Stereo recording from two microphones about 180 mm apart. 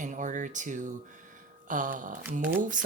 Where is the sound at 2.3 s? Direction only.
10° right (ahead or behind).